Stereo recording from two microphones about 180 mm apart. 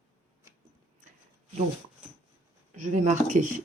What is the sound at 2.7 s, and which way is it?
Speech, 40° right (ahead or behind).